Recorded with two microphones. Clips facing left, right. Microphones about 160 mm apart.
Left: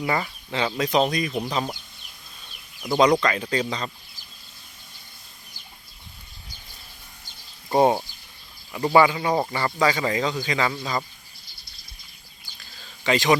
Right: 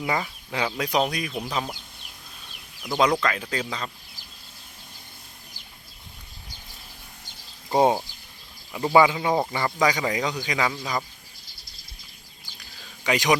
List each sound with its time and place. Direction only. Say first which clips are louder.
0.0 s speech: left 2 dB; 5° right (ahead or behind)
2.8 s speech: left 3 dB; 5° right (ahead or behind)
7.8 s speech: left 1 dB; 15° right (ahead or behind)
13.1 s speech: left 2 dB; 15° right (ahead or behind)